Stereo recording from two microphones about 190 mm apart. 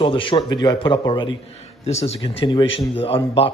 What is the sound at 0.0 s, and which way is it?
A man's voice, 25° left (ahead or behind).